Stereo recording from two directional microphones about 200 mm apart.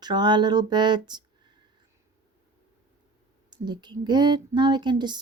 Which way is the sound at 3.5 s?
20° right (ahead or behind).